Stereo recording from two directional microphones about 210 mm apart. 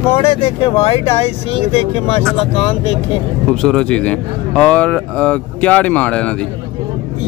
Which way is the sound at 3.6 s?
5° left (ahead or behind).